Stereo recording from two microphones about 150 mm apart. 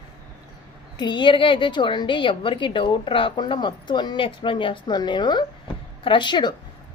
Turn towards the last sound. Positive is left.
turn(degrees=30)  # may be behind; listen again after turning